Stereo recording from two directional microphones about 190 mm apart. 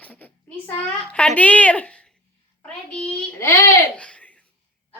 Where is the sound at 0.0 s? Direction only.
10° left (ahead or behind).